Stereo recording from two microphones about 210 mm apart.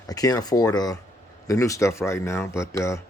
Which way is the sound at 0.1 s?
15° left (ahead or behind).